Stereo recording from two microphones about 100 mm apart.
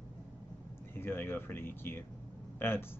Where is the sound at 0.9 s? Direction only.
20° left (ahead or behind).